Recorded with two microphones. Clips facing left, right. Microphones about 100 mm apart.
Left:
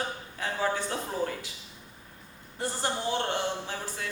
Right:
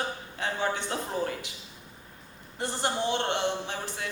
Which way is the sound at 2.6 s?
20° right (ahead or behind).